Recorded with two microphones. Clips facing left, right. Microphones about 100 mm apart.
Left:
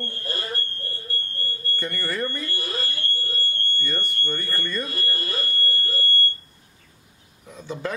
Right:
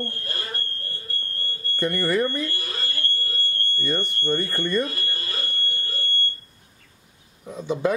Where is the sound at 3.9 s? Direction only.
20° right (ahead or behind).